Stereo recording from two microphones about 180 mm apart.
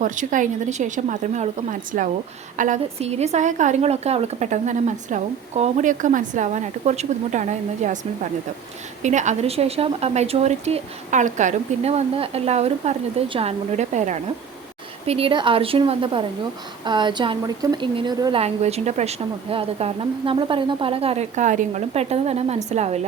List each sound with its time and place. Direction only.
0.0 s a woman's voice: 45° right (ahead or behind)